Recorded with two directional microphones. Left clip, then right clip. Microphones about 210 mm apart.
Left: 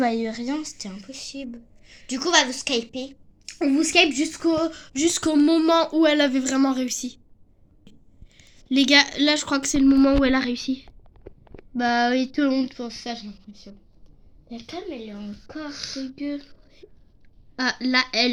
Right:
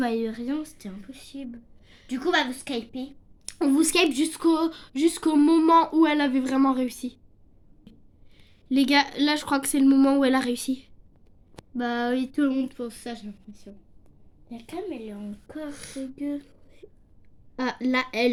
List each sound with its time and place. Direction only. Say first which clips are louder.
0.0 s a woman's voice: left 3 dB; 15° left (ahead or behind); by 3.0 s 30° left (ahead or behind)
3.6 s speech: left 3 dB; 20° right (ahead or behind); by 7.2 s 5° right (ahead or behind)
7.9 s a sound: even; centre (ahead or behind)
8.4 s speech: left 3 dB; centre (ahead or behind)
11.7 s speech: left 6 dB; 25° left (ahead or behind)
15.8 s a woman's voice: left 5 dB; 5° right (ahead or behind)
16.1 s speech: right 2 dB; 20° left (ahead or behind)
17.6 s a woman's voice: left 4 dB; 10° right (ahead or behind)